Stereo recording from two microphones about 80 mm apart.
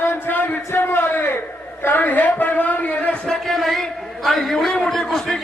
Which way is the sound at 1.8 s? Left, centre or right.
Left.